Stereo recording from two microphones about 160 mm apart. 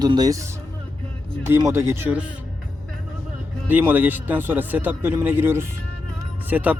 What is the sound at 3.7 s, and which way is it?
Speech, 10° right (ahead or behind).